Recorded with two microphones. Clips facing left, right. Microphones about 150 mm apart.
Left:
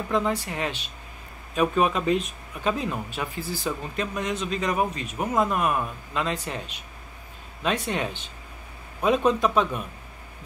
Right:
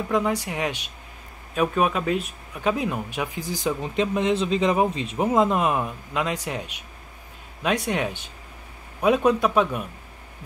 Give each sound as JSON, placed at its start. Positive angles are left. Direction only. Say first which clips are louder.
{"t": 0.1, "sound": "speech", "louder": "right 1 dB", "side_deg": -15}